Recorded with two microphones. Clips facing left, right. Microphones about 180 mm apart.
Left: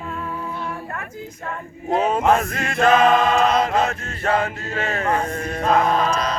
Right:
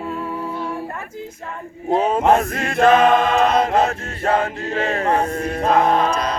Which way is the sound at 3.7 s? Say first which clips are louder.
Right 3 dB; 35° right (ahead or behind).